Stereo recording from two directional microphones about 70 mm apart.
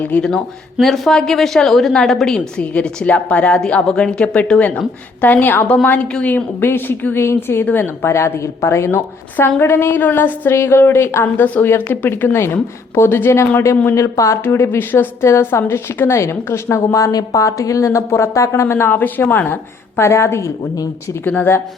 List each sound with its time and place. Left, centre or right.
0.2 s a woman's voice: centre
5.2 s a woman's voice: left
6.3 s a woman's voice: left
11.4 s a woman's voice: left
13.9 s a woman's voice: left
14.4 s a woman's voice: left
20.0 s a woman's voice: left
21.2 s a woman's voice: left